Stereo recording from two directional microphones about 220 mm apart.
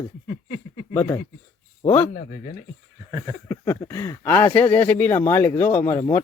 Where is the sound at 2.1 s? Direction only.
35° left (ahead or behind).